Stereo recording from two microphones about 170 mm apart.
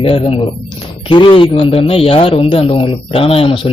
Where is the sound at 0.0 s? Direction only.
35° left (ahead or behind).